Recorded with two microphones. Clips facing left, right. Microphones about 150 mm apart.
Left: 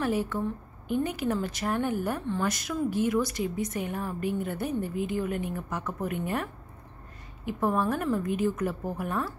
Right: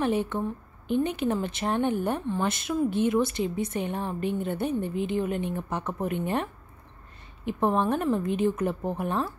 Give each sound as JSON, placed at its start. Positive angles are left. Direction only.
{"t": 0.0, "sound": "speech", "side_deg": -25}